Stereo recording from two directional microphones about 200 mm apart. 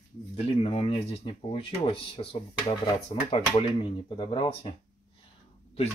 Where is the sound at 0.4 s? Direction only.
30° left (ahead or behind).